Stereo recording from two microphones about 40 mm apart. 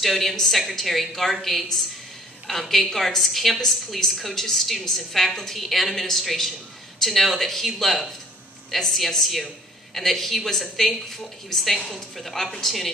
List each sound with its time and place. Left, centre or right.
0.0 s a woman's voice: centre